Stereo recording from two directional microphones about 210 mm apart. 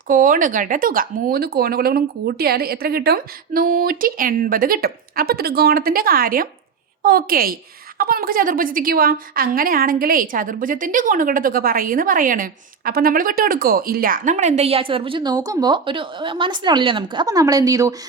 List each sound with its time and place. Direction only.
0.1 s a woman's voice: 40° right (ahead or behind); by 17.9 s 15° right (ahead or behind)